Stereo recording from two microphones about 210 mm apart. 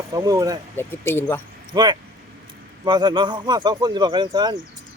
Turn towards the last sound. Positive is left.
turn(degrees=-20)  # may be behind; listen again after turning